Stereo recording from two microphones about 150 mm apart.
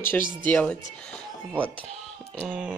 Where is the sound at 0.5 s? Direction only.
10° left (ahead or behind).